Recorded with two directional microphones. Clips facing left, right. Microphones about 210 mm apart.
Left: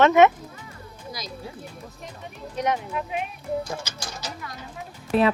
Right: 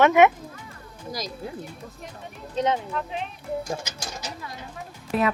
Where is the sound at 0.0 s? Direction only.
15° right (ahead or behind).